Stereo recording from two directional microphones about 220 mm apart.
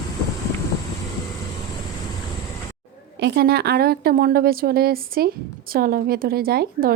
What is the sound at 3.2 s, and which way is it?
Speech, 45° right (ahead or behind).